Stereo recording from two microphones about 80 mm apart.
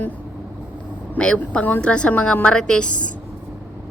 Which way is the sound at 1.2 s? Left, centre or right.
Centre.